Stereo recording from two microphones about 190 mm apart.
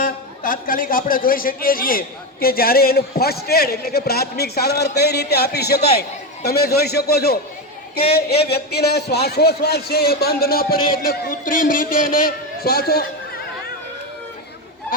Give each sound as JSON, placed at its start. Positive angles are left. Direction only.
{"t": 0.0, "sound": "a man's voice", "side_deg": 45}